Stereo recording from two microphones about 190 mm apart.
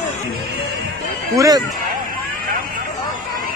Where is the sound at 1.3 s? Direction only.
20° right (ahead or behind).